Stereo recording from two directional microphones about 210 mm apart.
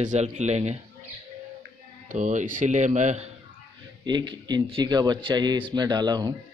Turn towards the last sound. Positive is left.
turn(degrees=-20)  # may be behind; listen again after turning